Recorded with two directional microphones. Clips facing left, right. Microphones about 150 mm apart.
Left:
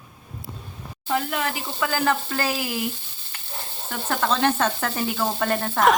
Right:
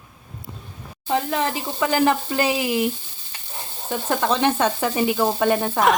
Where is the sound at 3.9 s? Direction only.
15° right (ahead or behind).